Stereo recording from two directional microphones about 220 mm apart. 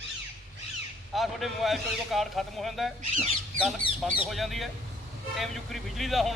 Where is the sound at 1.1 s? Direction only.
Centre (ahead or behind).